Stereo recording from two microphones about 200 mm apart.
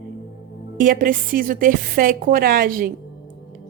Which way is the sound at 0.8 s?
40° right (ahead or behind).